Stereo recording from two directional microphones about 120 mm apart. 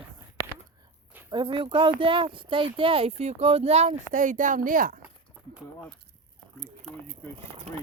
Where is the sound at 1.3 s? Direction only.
40° right (ahead or behind); by 4.8 s 90° right.